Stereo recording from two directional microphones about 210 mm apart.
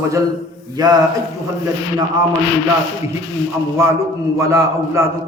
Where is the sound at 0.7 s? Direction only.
20° right (ahead or behind).